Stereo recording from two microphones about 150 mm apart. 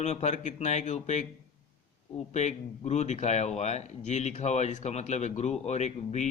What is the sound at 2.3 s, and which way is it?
Speech, 50° left (ahead or behind).